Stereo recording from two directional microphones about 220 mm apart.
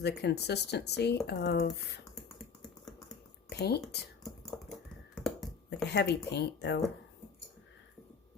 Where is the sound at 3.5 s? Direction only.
50° left (ahead or behind).